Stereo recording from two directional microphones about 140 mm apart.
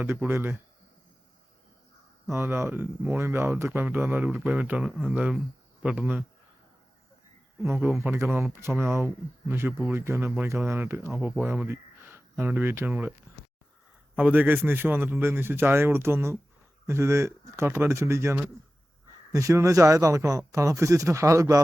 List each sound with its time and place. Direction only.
0.0 s speech: 15° right (ahead or behind)
2.3 s speech: 15° right (ahead or behind)
8.0 s speech: 15° right (ahead or behind)
14.2 s speech: 10° right (ahead or behind)